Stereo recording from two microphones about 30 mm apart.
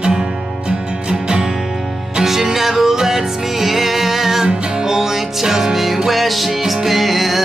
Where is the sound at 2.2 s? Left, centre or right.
Centre.